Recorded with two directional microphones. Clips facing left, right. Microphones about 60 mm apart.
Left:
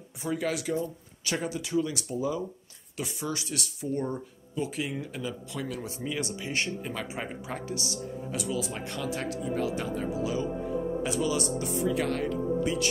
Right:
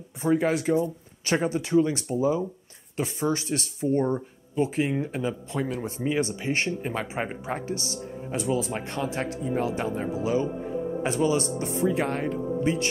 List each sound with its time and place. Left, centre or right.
0.2 s speech: right